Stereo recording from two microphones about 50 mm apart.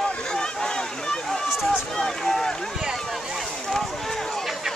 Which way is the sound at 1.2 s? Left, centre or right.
Centre.